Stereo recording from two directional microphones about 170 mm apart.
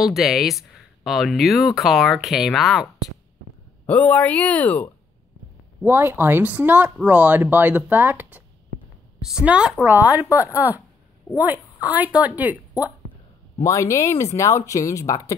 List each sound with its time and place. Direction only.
0.0 s speech: centre (ahead or behind)
5.9 s speech: 15° right (ahead or behind)
10.2 s speech: 20° left (ahead or behind)
11.3 s speech: 10° right (ahead or behind)
13.6 s speech: 15° left (ahead or behind)